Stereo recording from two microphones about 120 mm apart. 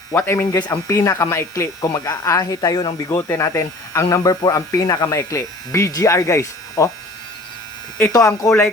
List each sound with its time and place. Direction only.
0.1 s speech: 20° left (ahead or behind); by 2.9 s 35° left (ahead or behind)
3.1 s speech: 20° left (ahead or behind)
8.1 s speech: 30° left (ahead or behind)